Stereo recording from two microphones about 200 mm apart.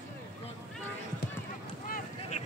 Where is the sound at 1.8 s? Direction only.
45° left (ahead or behind).